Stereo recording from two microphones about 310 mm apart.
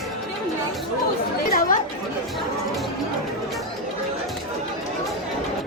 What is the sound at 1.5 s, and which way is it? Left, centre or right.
Chatter, left.